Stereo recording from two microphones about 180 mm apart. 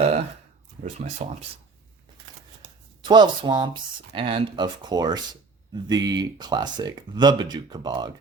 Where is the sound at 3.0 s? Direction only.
25° right (ahead or behind).